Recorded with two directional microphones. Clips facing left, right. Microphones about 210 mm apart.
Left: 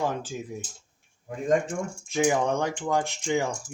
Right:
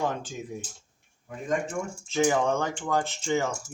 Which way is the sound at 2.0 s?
10° left (ahead or behind).